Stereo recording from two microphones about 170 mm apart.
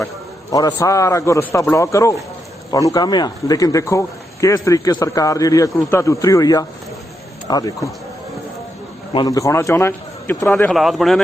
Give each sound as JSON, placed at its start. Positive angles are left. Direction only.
{"t": 0.5, "sound": "a man's voice", "side_deg": 20}
{"t": 9.1, "sound": "a man's voice", "side_deg": 20}
{"t": 10.7, "sound": "speech", "side_deg": 0}